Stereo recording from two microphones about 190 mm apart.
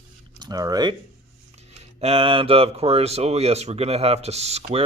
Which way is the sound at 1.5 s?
35° right (ahead or behind).